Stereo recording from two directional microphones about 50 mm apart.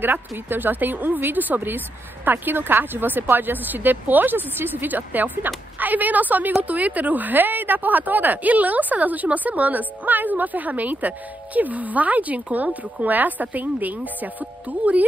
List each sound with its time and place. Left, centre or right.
0.5 s speech: right